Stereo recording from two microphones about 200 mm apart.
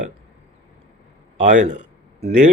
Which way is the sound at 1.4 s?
40° right (ahead or behind).